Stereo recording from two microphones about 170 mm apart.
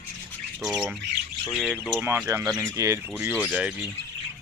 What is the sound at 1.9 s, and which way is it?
Speech, 15° right (ahead or behind).